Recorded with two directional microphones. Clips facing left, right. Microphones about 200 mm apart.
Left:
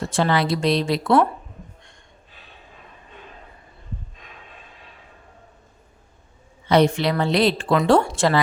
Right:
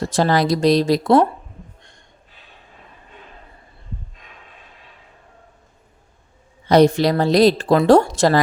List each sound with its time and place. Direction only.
0.0 s speech: 40° right (ahead or behind)
6.7 s speech: 40° right (ahead or behind)